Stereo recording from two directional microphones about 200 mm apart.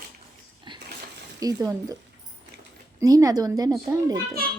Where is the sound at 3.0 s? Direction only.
15° right (ahead or behind).